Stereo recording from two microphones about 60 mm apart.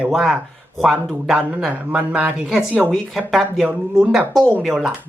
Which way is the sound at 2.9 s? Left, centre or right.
Centre.